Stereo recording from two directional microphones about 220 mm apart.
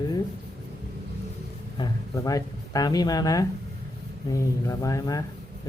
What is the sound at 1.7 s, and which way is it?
Speech, 15° left (ahead or behind).